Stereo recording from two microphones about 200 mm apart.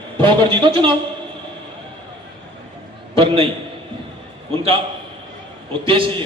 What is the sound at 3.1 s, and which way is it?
Speech, 25° right (ahead or behind).